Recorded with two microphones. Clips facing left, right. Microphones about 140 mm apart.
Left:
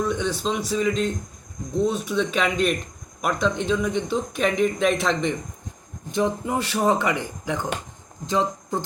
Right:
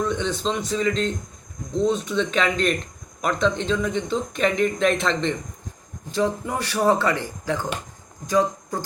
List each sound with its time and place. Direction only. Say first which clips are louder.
0.0 s speech: even; 10° left (ahead or behind)